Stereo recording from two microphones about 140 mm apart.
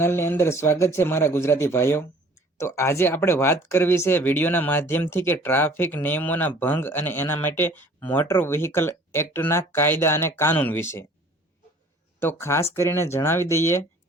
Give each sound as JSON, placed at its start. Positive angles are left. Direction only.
{"t": 0.0, "sound": "speech", "side_deg": 15}
{"t": 12.2, "sound": "speech", "side_deg": 15}